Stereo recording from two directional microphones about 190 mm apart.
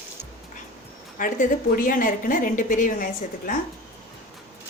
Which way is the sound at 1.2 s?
45° left (ahead or behind).